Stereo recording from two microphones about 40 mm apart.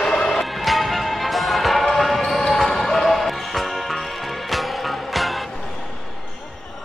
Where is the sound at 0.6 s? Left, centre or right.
Centre.